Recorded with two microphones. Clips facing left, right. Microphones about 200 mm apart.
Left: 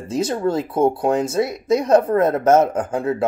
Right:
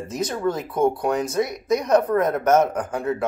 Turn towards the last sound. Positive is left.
turn(degrees=25)  # may be behind; listen again after turning